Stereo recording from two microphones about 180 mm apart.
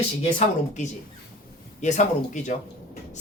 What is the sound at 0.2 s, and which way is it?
A woman's voice, 40° left (ahead or behind).